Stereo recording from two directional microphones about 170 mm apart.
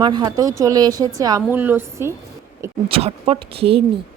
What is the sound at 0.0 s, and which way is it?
A woman's voice, 25° right (ahead or behind).